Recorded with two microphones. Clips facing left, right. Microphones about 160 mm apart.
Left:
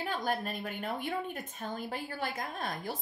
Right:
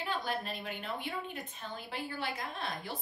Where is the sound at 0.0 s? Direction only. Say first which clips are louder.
Left 3 dB; 45° left (ahead or behind).